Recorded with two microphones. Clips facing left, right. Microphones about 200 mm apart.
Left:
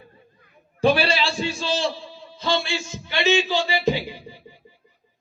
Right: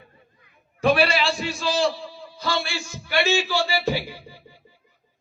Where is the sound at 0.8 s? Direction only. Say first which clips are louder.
Even; 30° left (ahead or behind).